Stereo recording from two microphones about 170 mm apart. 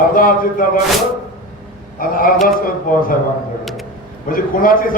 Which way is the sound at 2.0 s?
55° left (ahead or behind).